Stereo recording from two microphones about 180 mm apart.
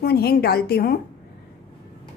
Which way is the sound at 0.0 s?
60° left (ahead or behind).